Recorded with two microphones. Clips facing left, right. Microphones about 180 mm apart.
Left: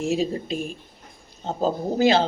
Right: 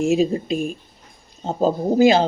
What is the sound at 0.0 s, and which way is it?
Speech, 10° right (ahead or behind).